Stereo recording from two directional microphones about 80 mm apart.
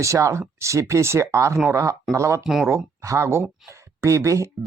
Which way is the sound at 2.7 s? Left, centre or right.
Right.